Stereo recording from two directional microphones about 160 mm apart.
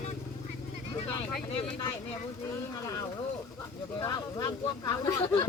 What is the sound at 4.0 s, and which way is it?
Speech, 25° left (ahead or behind).